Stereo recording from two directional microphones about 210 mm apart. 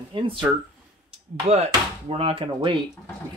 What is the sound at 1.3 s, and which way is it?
Speech, 35° right (ahead or behind).